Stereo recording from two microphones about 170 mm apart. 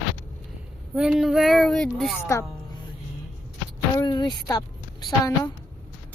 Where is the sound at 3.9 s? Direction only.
25° left (ahead or behind).